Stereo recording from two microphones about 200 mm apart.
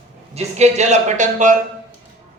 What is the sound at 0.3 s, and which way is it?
Speech, 35° right (ahead or behind).